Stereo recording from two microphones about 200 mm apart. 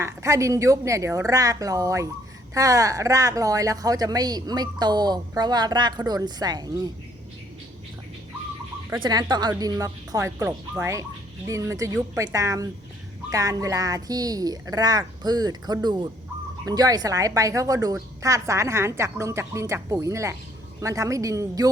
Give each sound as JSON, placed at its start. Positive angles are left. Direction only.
{"t": 0.0, "sound": "a woman's voice", "side_deg": -15}
{"t": 8.9, "sound": "a woman's voice", "side_deg": -20}